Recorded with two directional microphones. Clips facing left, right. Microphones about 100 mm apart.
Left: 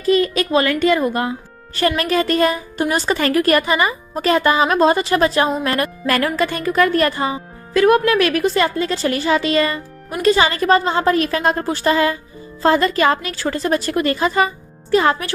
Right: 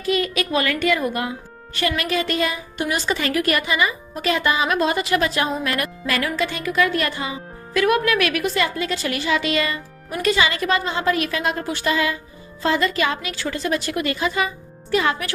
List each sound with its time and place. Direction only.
0.0 s a woman's voice: 35° left (ahead or behind)
6.1 s a woman's voice: 50° left (ahead or behind); by 15.3 s 35° left (ahead or behind)